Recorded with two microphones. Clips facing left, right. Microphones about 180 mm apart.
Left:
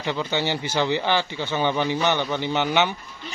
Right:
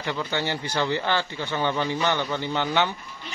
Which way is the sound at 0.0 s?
20° left (ahead or behind).